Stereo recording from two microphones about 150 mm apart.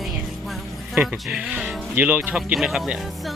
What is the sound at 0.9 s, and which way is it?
Speech, 5° right (ahead or behind).